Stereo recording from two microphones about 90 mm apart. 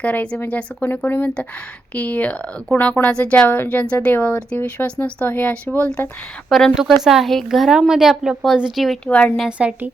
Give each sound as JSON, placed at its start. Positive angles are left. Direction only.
{"t": 0.0, "sound": "speech", "side_deg": 15}
{"t": 6.7, "sound": "speech", "side_deg": -5}
{"t": 9.0, "sound": "speech", "side_deg": 15}
{"t": 9.5, "sound": "a woman's voice", "side_deg": -15}